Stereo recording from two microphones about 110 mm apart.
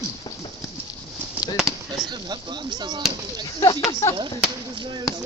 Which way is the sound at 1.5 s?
5° right (ahead or behind).